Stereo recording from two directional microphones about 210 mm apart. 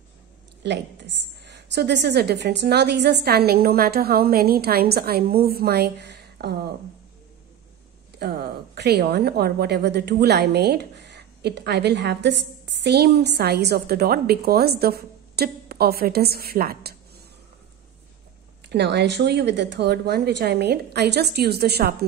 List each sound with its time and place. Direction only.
0.7 s a woman's voice: 55° right (ahead or behind)
8.2 s a woman's voice: 50° right (ahead or behind)
18.7 s a woman's voice: 55° right (ahead or behind)